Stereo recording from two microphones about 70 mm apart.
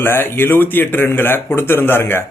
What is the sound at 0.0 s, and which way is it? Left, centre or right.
Speech, left.